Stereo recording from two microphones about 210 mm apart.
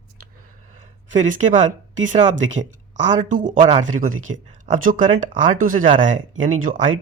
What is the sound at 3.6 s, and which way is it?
Speech, 25° right (ahead or behind).